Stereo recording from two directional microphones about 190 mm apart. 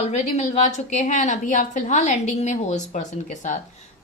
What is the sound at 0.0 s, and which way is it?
A woman's voice, 35° left (ahead or behind).